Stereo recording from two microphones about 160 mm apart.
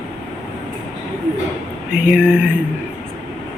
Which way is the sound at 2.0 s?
5° right (ahead or behind).